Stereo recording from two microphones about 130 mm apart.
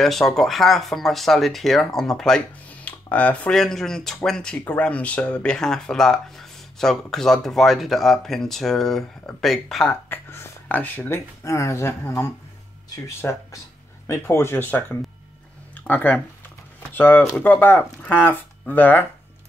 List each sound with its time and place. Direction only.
0.0 s speech: 5° left (ahead or behind)
10.0 s speech: 20° left (ahead or behind)